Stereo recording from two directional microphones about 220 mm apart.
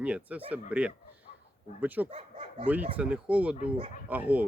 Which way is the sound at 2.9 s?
5° right (ahead or behind).